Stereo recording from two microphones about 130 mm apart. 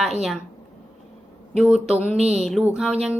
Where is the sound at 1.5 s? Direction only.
5° right (ahead or behind).